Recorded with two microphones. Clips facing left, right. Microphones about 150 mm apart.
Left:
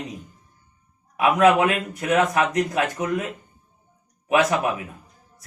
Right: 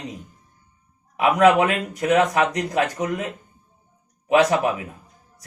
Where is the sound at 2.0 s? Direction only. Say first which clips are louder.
Right 2 dB; 20° right (ahead or behind).